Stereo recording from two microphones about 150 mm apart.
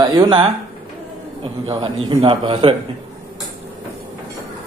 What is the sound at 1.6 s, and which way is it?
A man's voice, 40° right (ahead or behind).